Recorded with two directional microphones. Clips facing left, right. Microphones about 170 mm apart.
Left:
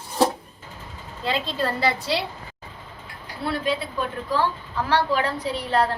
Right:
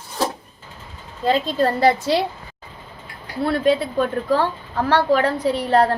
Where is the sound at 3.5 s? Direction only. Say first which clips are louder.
Right 7 dB; 50° right (ahead or behind).